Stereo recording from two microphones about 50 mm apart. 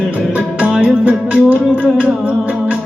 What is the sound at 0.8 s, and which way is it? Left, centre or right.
Music, right.